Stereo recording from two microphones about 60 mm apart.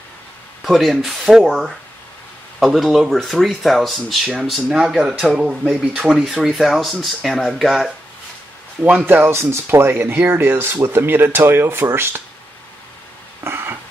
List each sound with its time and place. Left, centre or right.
0.7 s speech: centre
8.8 s speech: right
9.3 s speech: right
13.4 s a sound: right